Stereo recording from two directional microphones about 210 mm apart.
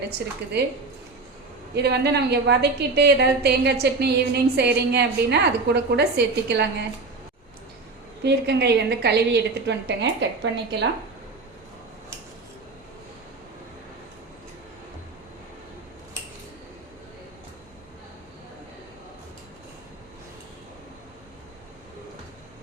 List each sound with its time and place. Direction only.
1.7 s a woman's voice: 50° right (ahead or behind)
8.2 s a woman's voice: 55° right (ahead or behind)